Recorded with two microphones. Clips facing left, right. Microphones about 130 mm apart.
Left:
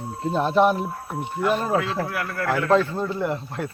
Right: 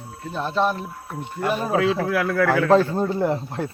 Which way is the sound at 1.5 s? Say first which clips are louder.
Even; 5° right (ahead or behind).